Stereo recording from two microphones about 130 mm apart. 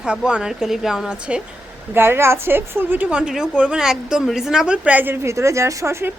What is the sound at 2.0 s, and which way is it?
A woman's voice, 20° right (ahead or behind).